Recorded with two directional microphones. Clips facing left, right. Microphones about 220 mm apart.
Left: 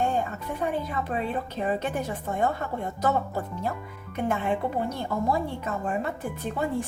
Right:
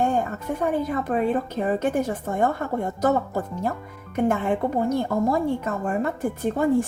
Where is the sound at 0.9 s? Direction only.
45° right (ahead or behind).